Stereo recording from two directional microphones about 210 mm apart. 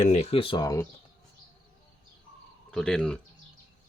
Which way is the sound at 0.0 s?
30° left (ahead or behind).